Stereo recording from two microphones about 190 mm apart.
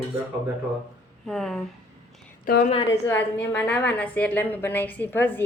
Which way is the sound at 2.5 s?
50° left (ahead or behind).